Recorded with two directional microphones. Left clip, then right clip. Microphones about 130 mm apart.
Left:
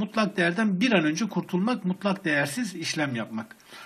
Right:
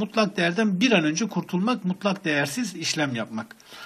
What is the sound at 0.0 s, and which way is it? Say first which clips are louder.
Speech: right 2 dB; 30° right (ahead or behind).